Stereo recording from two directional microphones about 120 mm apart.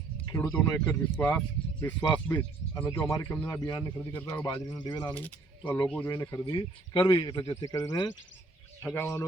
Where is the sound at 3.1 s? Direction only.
25° left (ahead or behind).